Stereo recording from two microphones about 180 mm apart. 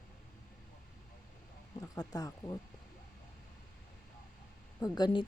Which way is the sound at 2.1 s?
20° left (ahead or behind).